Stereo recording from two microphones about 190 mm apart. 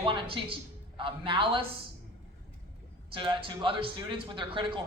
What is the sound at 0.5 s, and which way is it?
A woman's voice, 25° right (ahead or behind).